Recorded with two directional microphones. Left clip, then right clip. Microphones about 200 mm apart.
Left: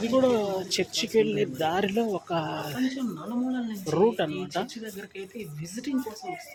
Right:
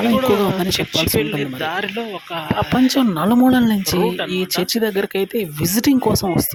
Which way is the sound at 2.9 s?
60° right (ahead or behind).